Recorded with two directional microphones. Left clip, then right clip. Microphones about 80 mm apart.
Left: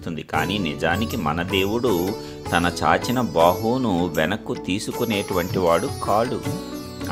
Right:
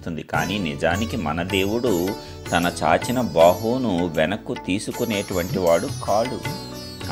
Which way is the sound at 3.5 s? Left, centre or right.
Left.